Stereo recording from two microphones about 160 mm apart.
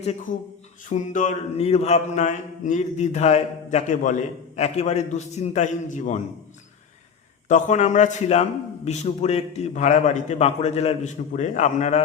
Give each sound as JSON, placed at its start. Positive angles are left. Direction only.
{"t": 0.3, "sound": "speech", "side_deg": 55}
{"t": 0.9, "sound": "mantra", "side_deg": 50}
{"t": 7.4, "sound": "mantra", "side_deg": 50}